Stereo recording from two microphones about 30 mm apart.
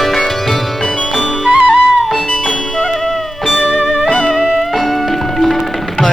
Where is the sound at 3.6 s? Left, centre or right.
Left.